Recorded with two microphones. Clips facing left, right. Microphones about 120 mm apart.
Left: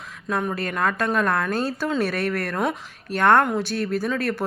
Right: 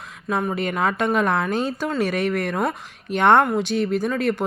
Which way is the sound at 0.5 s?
15° right (ahead or behind).